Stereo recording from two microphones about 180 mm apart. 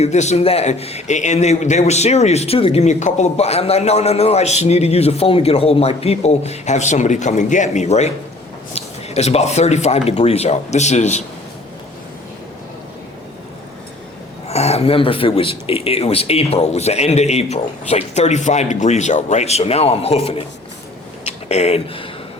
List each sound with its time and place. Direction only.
0.0 s a man's voice: 40° left (ahead or behind)
14.4 s a man's voice: 35° left (ahead or behind)
21.5 s a man's voice: 35° left (ahead or behind)